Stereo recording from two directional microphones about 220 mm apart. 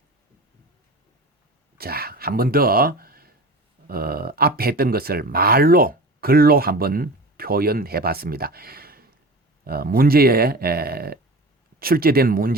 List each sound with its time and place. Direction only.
1.8 s speech: 45° right (ahead or behind)